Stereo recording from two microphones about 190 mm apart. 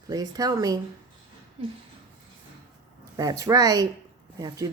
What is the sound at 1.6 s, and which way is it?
Speech, 30° right (ahead or behind).